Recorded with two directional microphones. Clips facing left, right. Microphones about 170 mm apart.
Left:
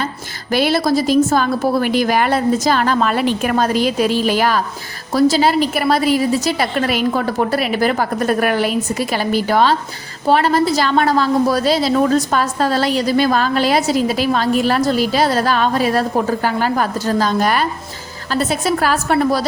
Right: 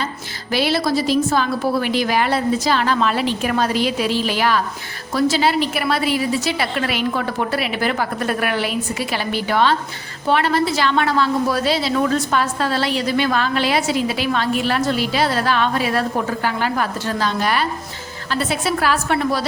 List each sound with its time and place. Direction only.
0.5 s a woman's voice: 45° left (ahead or behind)